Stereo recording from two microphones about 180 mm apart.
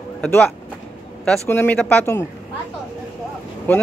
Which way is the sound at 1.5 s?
10° left (ahead or behind).